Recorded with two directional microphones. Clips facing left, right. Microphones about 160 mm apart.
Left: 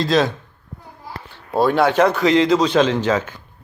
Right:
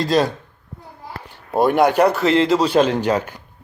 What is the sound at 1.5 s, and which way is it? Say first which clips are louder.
Speech: right 1 dB; 15° right (ahead or behind).